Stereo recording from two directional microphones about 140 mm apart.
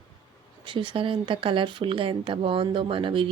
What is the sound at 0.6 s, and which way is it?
Speech, 35° right (ahead or behind).